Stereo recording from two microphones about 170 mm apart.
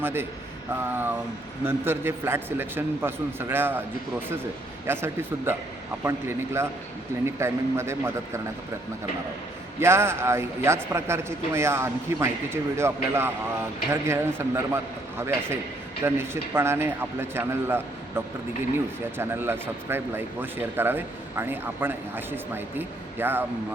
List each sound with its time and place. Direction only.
0.0 s speech: 15° right (ahead or behind)
4.9 s speech: 15° right (ahead or behind)
9.8 s speech: 15° right (ahead or behind)
19.1 s speech: 15° right (ahead or behind)